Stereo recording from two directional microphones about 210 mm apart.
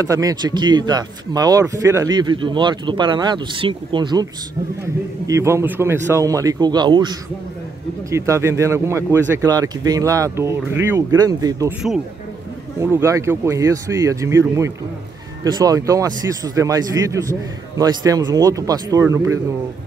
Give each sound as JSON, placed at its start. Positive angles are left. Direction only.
{"t": 0.0, "sound": "a man's voice", "side_deg": -15}
{"t": 8.1, "sound": "a man's voice", "side_deg": -15}
{"t": 12.8, "sound": "a man's voice", "side_deg": -15}
{"t": 15.4, "sound": "a man's voice", "side_deg": -15}